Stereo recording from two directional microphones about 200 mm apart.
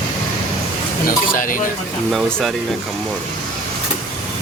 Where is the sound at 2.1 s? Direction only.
Centre (ahead or behind).